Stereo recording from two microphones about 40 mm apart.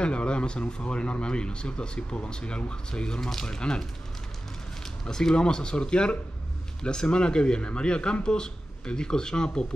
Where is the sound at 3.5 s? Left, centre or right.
Left.